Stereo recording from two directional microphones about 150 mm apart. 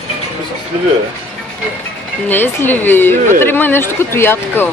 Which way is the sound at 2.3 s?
15° left (ahead or behind).